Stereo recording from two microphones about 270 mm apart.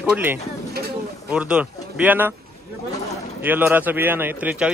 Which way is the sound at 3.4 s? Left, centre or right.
Centre.